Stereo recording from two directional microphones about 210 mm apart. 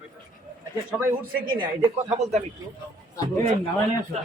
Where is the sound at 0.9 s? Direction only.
10° right (ahead or behind).